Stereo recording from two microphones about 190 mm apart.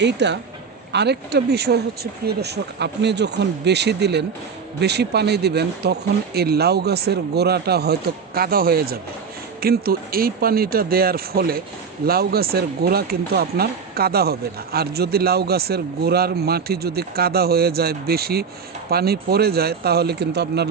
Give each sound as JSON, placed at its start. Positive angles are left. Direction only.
{"t": 0.0, "sound": "speech", "side_deg": -65}